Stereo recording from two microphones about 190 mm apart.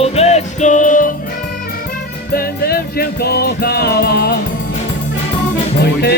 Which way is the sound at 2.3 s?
55° left (ahead or behind).